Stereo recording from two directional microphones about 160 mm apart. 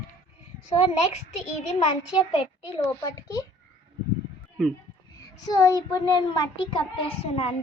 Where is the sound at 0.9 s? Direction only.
45° left (ahead or behind).